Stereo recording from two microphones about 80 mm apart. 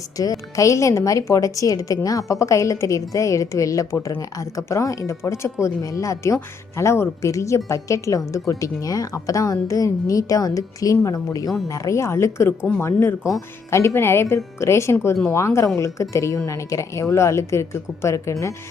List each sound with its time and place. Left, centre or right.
0.2 s a woman's voice: left